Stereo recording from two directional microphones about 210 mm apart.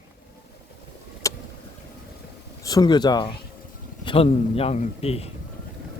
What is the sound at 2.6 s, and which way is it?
A man's voice, 15° left (ahead or behind).